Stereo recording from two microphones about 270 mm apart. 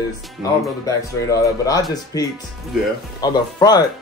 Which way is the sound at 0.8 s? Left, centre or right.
Centre.